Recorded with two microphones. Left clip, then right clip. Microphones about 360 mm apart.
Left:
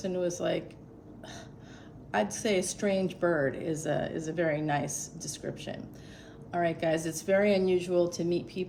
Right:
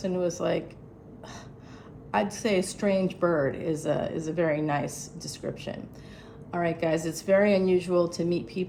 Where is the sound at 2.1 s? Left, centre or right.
Centre.